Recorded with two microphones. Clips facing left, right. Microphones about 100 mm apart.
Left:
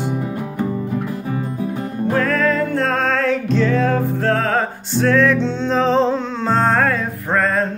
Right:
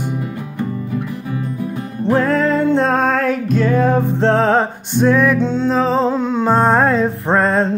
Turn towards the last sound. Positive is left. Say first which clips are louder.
# right 3 dB
turn(degrees=-30)  # may be behind; listen again after turning